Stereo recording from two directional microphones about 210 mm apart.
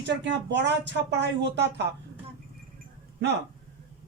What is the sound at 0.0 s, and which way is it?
Speech, 55° right (ahead or behind).